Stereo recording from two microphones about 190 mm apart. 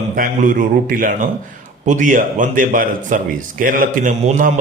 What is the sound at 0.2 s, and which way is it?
Speech, 45° right (ahead or behind).